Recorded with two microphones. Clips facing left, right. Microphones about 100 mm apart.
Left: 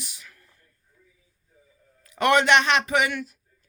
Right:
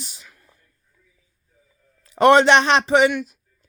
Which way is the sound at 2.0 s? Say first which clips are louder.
Right 7 dB; 30° right (ahead or behind).